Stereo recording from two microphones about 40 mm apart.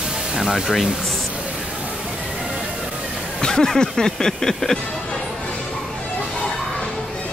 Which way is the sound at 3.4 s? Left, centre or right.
Centre.